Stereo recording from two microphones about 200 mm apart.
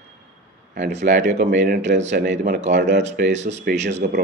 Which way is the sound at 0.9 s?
60° right (ahead or behind).